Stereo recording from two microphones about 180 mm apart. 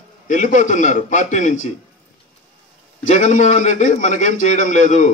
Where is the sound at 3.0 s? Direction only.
40° left (ahead or behind).